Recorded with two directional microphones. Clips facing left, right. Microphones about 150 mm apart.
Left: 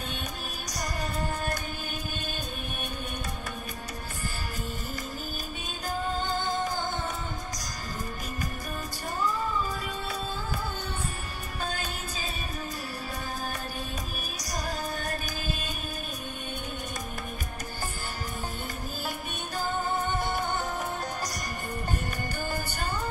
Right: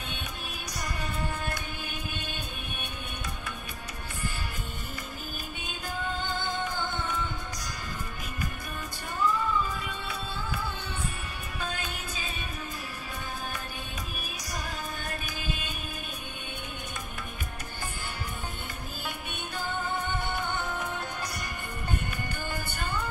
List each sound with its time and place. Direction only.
0.7 s music: 40° left (ahead or behind)
5.6 s music: 40° left (ahead or behind)
9.2 s music: 40° left (ahead or behind)
11.6 s music: 40° left (ahead or behind)
14.4 s music: 40° left (ahead or behind)
19.0 s music: 40° left (ahead or behind)
22.5 s music: 40° left (ahead or behind)